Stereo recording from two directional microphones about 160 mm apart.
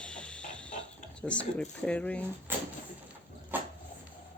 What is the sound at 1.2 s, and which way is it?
Speech, 5° left (ahead or behind).